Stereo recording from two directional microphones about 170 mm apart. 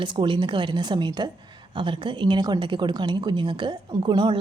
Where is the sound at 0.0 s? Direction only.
30° right (ahead or behind).